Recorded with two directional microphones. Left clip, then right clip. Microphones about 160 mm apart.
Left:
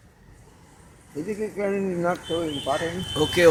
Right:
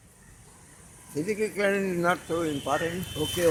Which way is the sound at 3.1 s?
20° left (ahead or behind).